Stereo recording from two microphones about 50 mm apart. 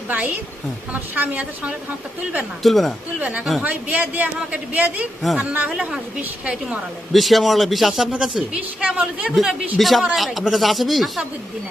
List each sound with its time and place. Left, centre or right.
0.1 s a man's voice: right
2.6 s speech: centre
3.2 s a woman's voice: right
5.2 s speech: centre
6.1 s a woman's voice: centre
7.1 s speech: centre
8.2 s a woman's voice: centre
9.3 s a woman's voice: centre